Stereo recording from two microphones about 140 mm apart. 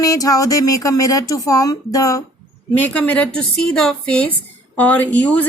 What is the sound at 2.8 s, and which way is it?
Speech, 10° left (ahead or behind).